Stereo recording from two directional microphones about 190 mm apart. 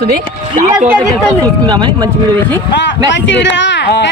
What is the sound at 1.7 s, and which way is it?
Speech, 20° right (ahead or behind).